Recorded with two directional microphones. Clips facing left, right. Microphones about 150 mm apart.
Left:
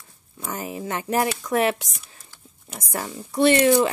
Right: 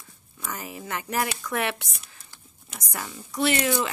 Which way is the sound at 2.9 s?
30° left (ahead or behind).